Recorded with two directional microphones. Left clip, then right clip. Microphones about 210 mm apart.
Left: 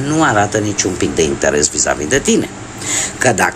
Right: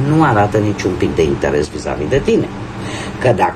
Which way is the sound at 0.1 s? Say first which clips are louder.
Even; 20° left (ahead or behind).